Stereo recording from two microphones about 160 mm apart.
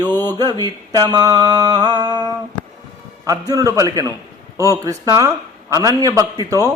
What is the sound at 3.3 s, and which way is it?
Mantra, 20° right (ahead or behind).